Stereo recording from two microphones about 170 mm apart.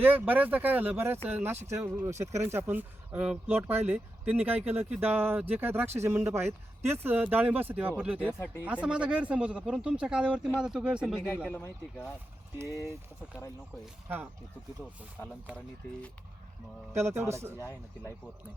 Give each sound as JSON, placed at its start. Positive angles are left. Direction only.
{"t": 0.0, "sound": "speech", "side_deg": -10}
{"t": 11.4, "sound": "speech", "side_deg": 10}
{"t": 12.5, "sound": "speech", "side_deg": -15}
{"t": 15.2, "sound": "speech", "side_deg": 15}
{"t": 17.1, "sound": "speech", "side_deg": -15}
{"t": 17.6, "sound": "speech", "side_deg": 20}